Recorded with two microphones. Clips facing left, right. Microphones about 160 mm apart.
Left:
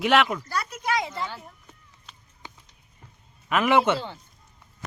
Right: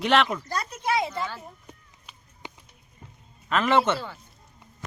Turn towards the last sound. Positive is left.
turn(degrees=25)  # may be behind; listen again after turning